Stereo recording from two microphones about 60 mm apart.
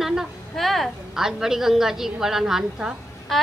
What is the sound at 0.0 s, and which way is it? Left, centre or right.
A woman's voice, centre.